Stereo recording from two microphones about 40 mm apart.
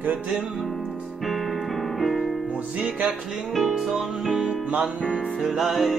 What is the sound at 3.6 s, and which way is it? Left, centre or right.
Music, centre.